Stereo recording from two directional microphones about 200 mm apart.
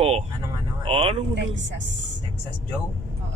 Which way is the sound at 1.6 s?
65° right (ahead or behind).